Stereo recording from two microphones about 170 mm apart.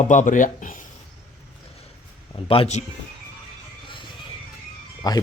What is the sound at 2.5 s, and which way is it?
Speech, 35° left (ahead or behind).